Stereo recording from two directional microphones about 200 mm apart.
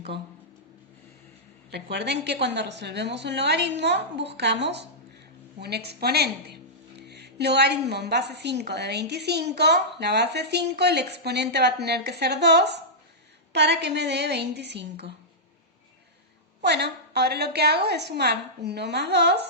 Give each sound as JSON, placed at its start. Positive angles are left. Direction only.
{"t": 1.7, "sound": "speech", "side_deg": -55}
{"t": 16.6, "sound": "speech", "side_deg": -55}